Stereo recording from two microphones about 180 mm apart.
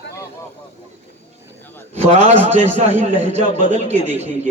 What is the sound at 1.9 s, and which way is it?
A man's voice, 40° right (ahead or behind).